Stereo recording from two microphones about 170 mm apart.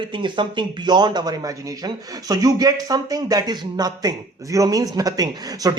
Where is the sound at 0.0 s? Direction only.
25° right (ahead or behind).